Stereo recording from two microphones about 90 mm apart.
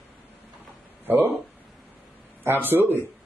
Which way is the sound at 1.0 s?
20° right (ahead or behind).